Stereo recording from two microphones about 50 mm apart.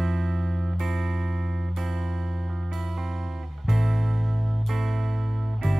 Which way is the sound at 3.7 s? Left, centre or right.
Centre.